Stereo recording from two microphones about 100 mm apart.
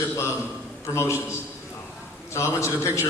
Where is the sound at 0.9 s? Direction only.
30° left (ahead or behind).